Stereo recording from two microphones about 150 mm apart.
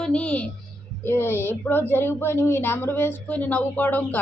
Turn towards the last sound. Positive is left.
turn(degrees=10)  # may be behind; listen again after turning